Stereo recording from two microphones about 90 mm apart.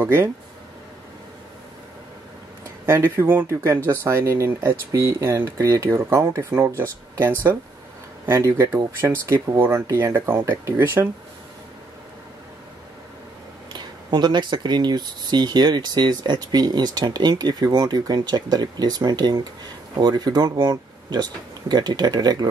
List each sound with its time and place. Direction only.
0.0 s speech: 30° right (ahead or behind)
2.9 s speech: 25° right (ahead or behind)
13.7 s speech: 55° right (ahead or behind)